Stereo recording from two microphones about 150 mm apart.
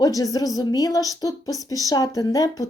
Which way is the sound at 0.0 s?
25° left (ahead or behind).